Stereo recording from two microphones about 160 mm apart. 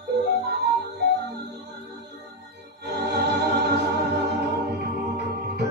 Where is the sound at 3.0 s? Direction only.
90° right.